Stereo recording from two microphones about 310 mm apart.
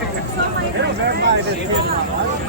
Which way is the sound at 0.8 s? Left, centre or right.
Right.